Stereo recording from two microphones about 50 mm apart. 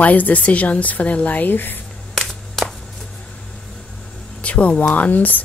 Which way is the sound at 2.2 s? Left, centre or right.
Centre.